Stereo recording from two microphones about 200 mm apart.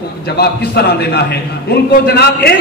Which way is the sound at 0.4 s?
50° left (ahead or behind).